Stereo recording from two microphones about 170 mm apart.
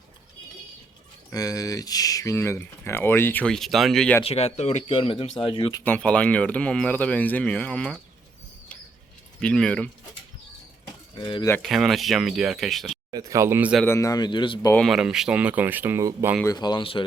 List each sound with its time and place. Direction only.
1.3 s speech: 20° left (ahead or behind); by 4.2 s 5° left (ahead or behind)
4.2 s speech: 35° left (ahead or behind)
5.8 s speech: 5° left (ahead or behind)
9.4 s speech: 5° left (ahead or behind)
11.1 s speech: 25° left (ahead or behind)
11.4 s speech: 10° left (ahead or behind)
11.7 s speech: centre (ahead or behind)
13.1 s speech: 20° right (ahead or behind)
13.8 s speech: 15° left (ahead or behind)
14.8 s speech: 5° right (ahead or behind)
16.4 s speech: 25° left (ahead or behind)